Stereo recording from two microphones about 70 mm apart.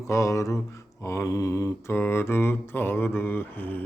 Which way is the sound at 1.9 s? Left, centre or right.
Left.